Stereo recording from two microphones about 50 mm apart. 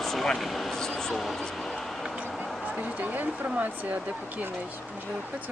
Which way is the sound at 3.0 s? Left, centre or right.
Right.